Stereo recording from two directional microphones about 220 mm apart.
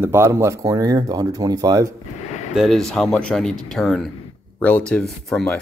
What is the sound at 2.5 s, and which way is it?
Speech, centre (ahead or behind).